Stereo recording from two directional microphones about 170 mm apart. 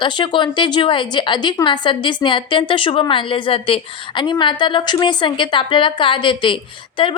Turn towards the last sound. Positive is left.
turn(degrees=30)  # may be behind; listen again after turning